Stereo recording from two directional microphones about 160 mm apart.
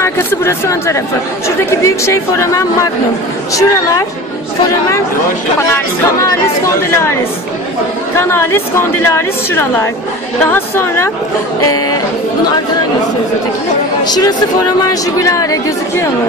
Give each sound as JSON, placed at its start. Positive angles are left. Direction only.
{"t": 0.0, "sound": "a woman's voice", "side_deg": 15}
{"t": 6.9, "sound": "a woman's voice", "side_deg": 15}
{"t": 8.2, "sound": "a woman's voice", "side_deg": 15}
{"t": 14.9, "sound": "speech", "side_deg": 20}